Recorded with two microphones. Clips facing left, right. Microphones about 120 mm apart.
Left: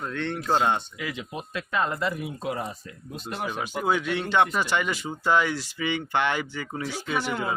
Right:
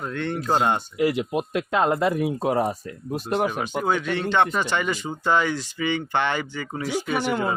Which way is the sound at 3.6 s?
5° left (ahead or behind).